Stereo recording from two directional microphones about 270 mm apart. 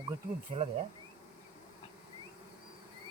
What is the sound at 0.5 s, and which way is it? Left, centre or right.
Speech, right.